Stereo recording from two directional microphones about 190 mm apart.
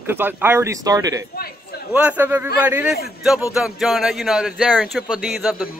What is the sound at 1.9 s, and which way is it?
Speech, 5° right (ahead or behind).